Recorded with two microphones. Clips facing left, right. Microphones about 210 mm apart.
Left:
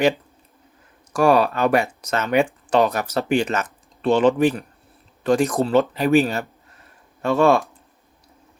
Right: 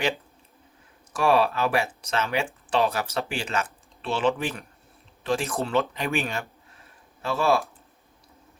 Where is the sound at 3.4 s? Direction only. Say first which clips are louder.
Left 6 dB; 40° left (ahead or behind).